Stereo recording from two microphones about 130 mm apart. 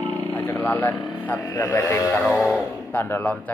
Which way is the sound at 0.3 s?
15° left (ahead or behind).